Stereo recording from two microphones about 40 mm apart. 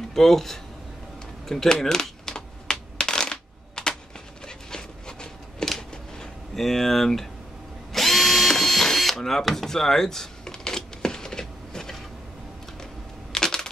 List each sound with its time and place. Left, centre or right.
0.1 s speech: centre
1.5 s shuffling cards: centre
4.5 s dog: centre
5.8 s a sound: centre
6.6 s speech: centre
7.9 s drill: centre
13.3 s a sound: centre